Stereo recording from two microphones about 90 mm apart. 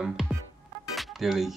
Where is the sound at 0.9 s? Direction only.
Centre (ahead or behind).